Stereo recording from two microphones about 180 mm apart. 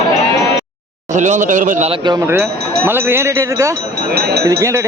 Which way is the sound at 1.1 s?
45° right (ahead or behind).